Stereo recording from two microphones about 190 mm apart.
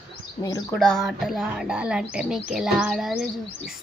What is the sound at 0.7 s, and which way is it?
Speech, centre (ahead or behind).